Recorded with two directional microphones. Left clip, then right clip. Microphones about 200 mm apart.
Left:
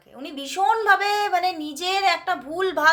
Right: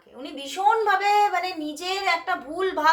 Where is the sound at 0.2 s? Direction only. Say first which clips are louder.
Left 2 dB; 40° left (ahead or behind).